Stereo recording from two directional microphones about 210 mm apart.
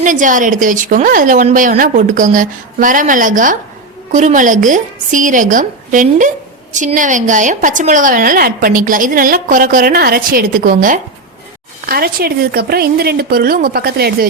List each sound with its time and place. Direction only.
0.0 s a woman's voice: 40° right (ahead or behind)